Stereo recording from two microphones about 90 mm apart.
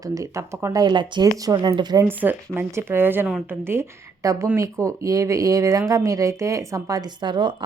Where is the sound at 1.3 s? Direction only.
45° right (ahead or behind).